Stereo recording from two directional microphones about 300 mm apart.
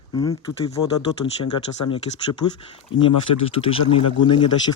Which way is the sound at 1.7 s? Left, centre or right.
Left.